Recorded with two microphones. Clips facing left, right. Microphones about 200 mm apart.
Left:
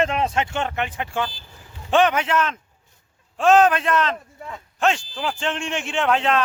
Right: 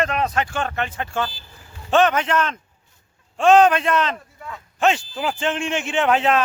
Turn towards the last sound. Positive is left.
turn(degrees=-5)  # may be behind; listen again after turning